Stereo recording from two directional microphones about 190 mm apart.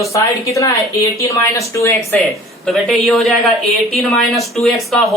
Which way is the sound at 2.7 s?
Centre (ahead or behind).